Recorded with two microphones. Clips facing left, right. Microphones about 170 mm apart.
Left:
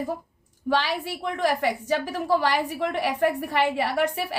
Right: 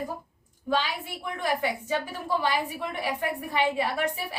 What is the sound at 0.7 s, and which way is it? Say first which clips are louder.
A woman's voice: left 3 dB; 80° left.